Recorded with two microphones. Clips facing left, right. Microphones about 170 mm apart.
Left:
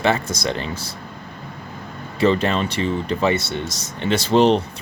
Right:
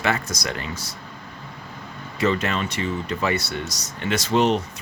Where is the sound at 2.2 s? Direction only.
30° left (ahead or behind).